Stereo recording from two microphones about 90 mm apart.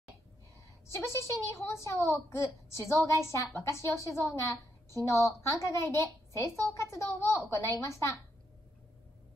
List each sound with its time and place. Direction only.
1.0 s a woman's voice: 35° left (ahead or behind)